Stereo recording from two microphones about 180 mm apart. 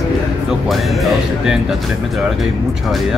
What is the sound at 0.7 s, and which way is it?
Speech, centre (ahead or behind).